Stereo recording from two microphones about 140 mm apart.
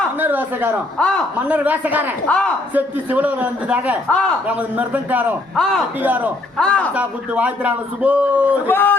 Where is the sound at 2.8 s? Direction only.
10° right (ahead or behind).